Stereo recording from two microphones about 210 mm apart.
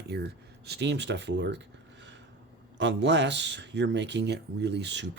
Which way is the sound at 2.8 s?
55° right (ahead or behind).